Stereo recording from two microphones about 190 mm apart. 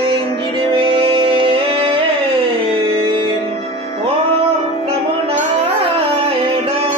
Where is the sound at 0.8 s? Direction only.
30° right (ahead or behind).